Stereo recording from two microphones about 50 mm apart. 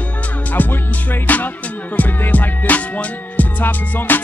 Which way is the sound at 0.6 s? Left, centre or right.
Left.